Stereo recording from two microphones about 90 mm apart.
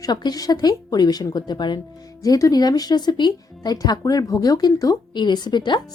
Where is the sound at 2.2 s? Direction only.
45° left (ahead or behind).